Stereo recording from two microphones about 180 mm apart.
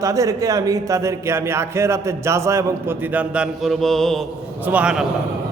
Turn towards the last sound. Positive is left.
turn(degrees=-5)  # may be behind; listen again after turning